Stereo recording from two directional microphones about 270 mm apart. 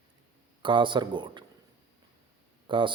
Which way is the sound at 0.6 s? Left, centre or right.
Centre.